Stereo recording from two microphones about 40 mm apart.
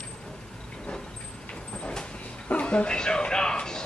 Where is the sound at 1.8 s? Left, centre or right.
Left.